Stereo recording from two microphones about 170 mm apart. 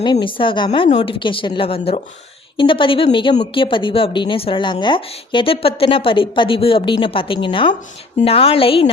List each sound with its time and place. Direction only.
0.0 s a woman's voice: 25° left (ahead or behind)
0.9 s a woman's voice: 45° left (ahead or behind)
1.2 s a woman's voice: 30° left (ahead or behind)